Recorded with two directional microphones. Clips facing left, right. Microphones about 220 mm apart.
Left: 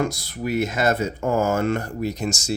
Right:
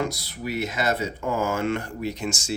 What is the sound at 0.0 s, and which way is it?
Speech, 50° left (ahead or behind).